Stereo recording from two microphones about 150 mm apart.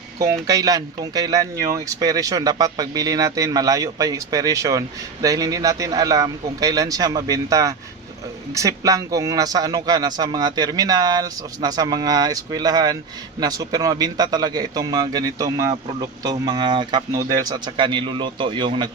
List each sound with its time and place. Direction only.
0.4 s a man's voice: 25° right (ahead or behind)